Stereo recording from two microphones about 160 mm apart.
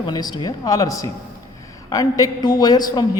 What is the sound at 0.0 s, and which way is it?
A man's voice, 25° left (ahead or behind).